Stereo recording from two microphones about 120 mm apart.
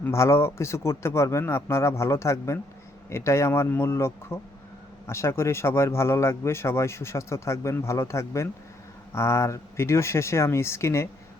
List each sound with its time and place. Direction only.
0.0 s speech: 20° left (ahead or behind)